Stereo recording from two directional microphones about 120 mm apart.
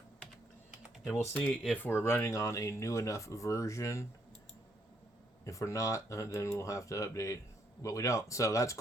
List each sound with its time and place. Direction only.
0.7 s typing: 5° right (ahead or behind)
1.1 s speech: 10° left (ahead or behind)
5.5 s speech: 25° left (ahead or behind)